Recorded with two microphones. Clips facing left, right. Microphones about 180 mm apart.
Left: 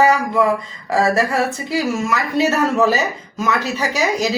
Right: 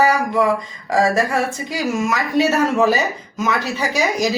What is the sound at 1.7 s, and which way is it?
A woman's voice, 20° right (ahead or behind).